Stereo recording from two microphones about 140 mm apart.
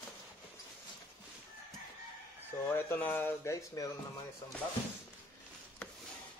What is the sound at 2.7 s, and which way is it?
Speech, 15° left (ahead or behind).